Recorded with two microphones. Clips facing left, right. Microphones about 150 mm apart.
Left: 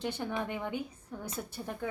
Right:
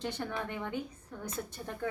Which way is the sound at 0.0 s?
15° left (ahead or behind).